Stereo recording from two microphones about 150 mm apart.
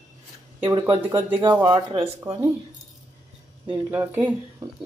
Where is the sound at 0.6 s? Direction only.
30° right (ahead or behind).